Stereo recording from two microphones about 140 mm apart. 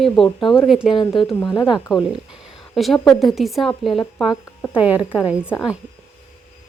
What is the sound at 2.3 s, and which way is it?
Speech, centre (ahead or behind).